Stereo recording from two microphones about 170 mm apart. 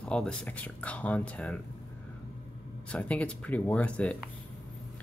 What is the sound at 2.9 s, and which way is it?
Speech, 10° left (ahead or behind).